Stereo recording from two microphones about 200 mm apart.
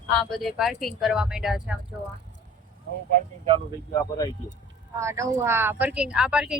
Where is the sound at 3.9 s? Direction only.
15° left (ahead or behind).